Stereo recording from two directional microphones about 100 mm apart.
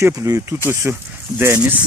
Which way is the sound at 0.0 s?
30° right (ahead or behind).